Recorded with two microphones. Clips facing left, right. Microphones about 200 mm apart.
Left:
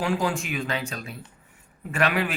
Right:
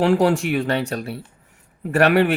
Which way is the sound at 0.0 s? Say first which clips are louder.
Right 9 dB; 70° right (ahead or behind).